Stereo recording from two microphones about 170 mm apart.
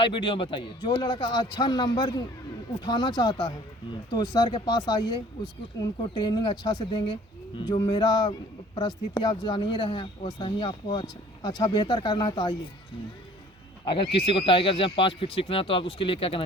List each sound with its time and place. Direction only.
0.0 s speech: 30° left (ahead or behind)
13.8 s speech: 30° left (ahead or behind)